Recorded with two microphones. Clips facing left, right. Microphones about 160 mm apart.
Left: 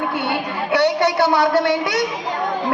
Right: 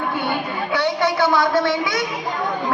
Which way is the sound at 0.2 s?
70° left (ahead or behind).